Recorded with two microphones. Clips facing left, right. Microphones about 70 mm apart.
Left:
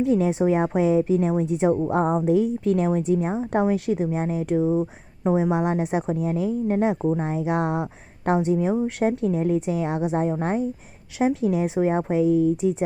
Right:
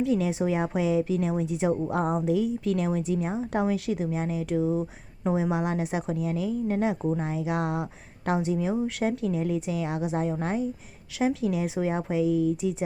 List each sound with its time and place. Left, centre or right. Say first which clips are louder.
0.0 s speech: left 5 dB; left